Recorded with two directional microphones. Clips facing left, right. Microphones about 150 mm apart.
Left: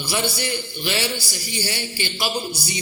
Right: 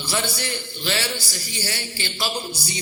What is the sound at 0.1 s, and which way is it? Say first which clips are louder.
Speech: left 2 dB; 15° left (ahead or behind).